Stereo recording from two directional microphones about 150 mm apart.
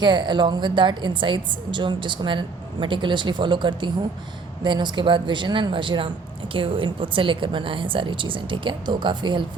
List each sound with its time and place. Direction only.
0.0 s speech: 30° right (ahead or behind)